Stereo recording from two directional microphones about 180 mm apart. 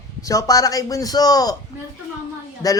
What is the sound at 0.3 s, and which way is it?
A man's voice, 20° left (ahead or behind).